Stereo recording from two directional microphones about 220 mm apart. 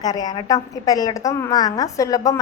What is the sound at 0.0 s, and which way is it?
A woman's voice, 15° left (ahead or behind).